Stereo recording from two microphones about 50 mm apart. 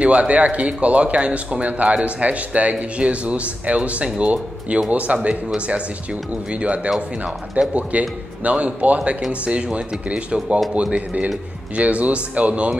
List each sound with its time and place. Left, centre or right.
0.0 s speech: right
6.5 s speech: right